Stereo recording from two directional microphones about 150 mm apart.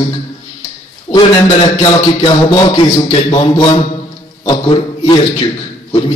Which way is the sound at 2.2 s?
30° left (ahead or behind).